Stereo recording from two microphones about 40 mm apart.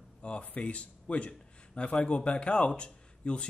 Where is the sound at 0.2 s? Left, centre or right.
Left.